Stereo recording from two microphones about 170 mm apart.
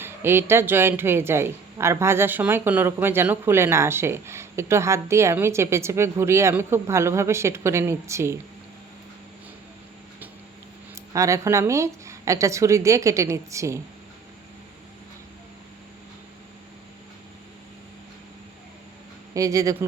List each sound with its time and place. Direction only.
0.0 s speech: 15° right (ahead or behind)
10.9 s speech: 20° right (ahead or behind)
19.3 s speech: 20° right (ahead or behind)